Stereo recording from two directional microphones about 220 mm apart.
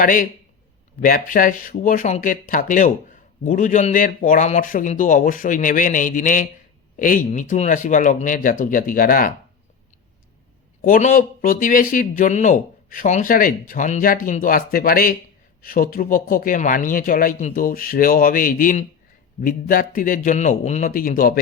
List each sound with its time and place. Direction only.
0.0 s speech: 35° left (ahead or behind)
10.8 s speech: 40° left (ahead or behind)